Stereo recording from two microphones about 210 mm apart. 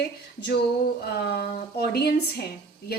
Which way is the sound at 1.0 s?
50° left (ahead or behind).